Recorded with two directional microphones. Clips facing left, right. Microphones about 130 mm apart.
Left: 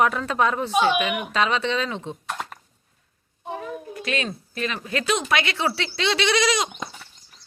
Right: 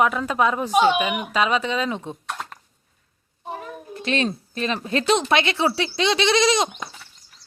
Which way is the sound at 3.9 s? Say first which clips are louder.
Right 6 dB; 30° right (ahead or behind).